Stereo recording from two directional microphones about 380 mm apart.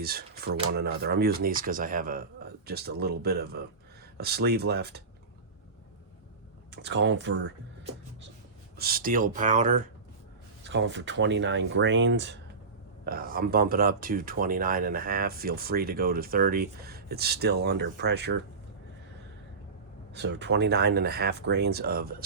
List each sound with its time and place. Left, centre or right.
0.0 s speech: right
6.7 s speech: right
8.8 s speech: right
20.1 s speech: right